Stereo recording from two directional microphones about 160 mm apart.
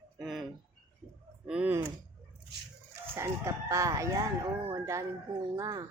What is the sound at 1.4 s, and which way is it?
Speech, 10° right (ahead or behind).